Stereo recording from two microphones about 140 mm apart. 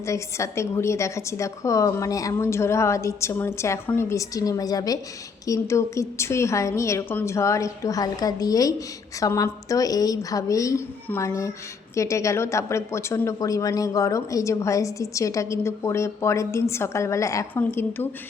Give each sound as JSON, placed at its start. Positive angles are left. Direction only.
{"t": 0.0, "sound": "a woman's voice", "side_deg": 20}